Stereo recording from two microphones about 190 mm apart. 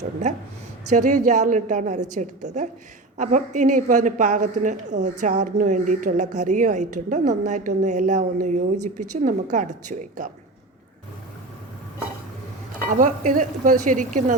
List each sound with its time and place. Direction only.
0.9 s a woman's voice: 40° right (ahead or behind)
12.9 s speech: 40° right (ahead or behind)